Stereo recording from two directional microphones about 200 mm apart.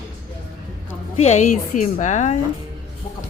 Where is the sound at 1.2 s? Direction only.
35° left (ahead or behind).